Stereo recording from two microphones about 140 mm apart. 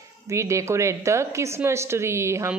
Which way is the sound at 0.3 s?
20° right (ahead or behind).